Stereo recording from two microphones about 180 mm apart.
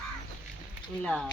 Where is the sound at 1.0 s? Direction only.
5° left (ahead or behind).